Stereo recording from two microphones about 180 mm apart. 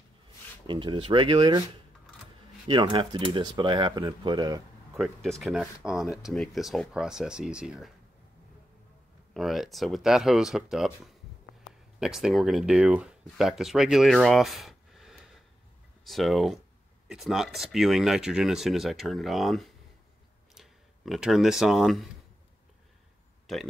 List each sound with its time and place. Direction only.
0.7 s speech: 25° right (ahead or behind)
2.7 s speech: 25° right (ahead or behind)
4.9 s speech: centre (ahead or behind)
9.3 s speech: centre (ahead or behind)
23.4 s a sound: centre (ahead or behind)